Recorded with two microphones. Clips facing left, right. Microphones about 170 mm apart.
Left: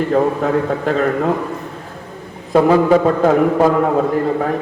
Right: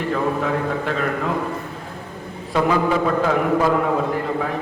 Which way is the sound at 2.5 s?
40° left (ahead or behind).